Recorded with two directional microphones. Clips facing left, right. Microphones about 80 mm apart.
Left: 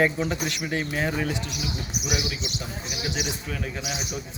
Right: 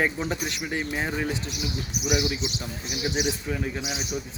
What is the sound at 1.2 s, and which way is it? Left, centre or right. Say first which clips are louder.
Speech: even; right.